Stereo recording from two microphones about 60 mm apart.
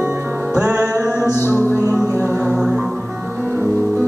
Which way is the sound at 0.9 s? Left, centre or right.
Left.